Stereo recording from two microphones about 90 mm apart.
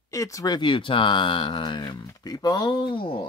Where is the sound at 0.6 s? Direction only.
65° left (ahead or behind).